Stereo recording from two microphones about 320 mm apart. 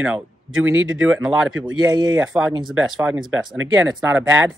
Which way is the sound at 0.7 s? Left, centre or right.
Right.